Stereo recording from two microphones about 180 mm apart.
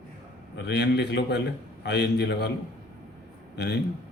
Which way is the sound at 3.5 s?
65° left (ahead or behind).